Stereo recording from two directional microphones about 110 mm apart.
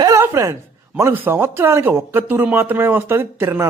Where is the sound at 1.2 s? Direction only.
20° right (ahead or behind).